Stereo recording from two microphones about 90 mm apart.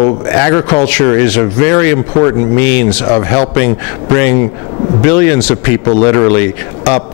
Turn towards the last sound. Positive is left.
turn(degrees=20)  # may be behind; listen again after turning